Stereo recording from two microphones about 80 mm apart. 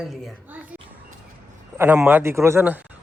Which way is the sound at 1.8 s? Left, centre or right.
Right.